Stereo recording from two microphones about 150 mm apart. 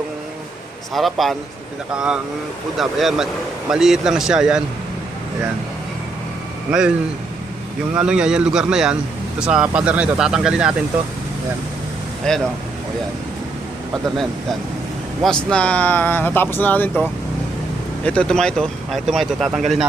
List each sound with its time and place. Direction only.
0.9 s speech: centre (ahead or behind)
6.7 s speech: 5° right (ahead or behind)
7.9 s speech: 5° right (ahead or behind)
12.3 s speech: 5° left (ahead or behind)
15.2 s speech: 5° left (ahead or behind)
18.0 s speech: 5° left (ahead or behind)